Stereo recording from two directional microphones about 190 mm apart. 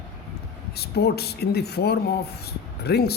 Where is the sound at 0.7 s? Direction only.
55° left (ahead or behind).